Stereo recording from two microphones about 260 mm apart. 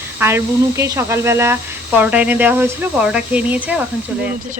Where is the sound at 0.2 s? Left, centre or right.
Centre.